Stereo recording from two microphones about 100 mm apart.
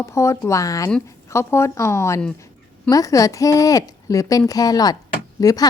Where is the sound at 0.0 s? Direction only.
30° left (ahead or behind).